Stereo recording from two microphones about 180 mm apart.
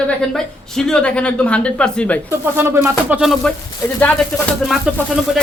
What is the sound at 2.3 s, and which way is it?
Speech, 15° right (ahead or behind).